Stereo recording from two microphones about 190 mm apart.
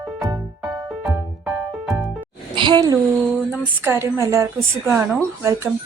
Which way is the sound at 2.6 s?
25° right (ahead or behind).